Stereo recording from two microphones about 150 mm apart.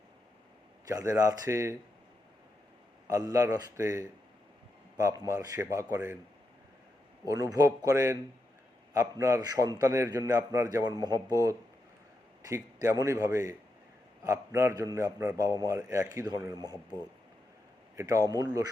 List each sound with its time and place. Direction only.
0.9 s a man's voice: 20° right (ahead or behind)
3.1 s a man's voice: 25° right (ahead or behind)
7.3 s a man's voice: 25° right (ahead or behind)
17.9 s a man's voice: 20° right (ahead or behind)